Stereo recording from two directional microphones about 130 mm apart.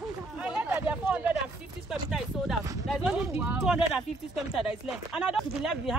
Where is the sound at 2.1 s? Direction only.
Centre (ahead or behind).